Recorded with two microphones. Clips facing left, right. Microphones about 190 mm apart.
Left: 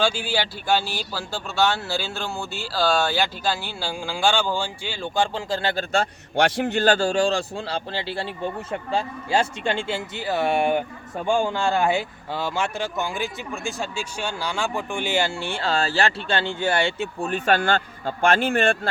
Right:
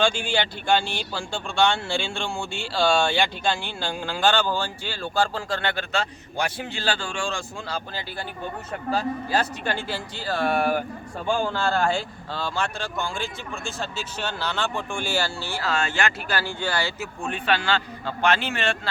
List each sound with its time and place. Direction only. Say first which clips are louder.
0.0 s speech: even; 5° left (ahead or behind); by 5.8 s 30° left (ahead or behind)
6.3 s a man's voice: left 8 dB; 85° left
6.7 s speech: left 10 dB; 45° left (ahead or behind)